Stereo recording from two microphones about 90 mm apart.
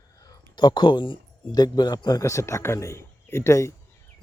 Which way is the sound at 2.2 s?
35° left (ahead or behind).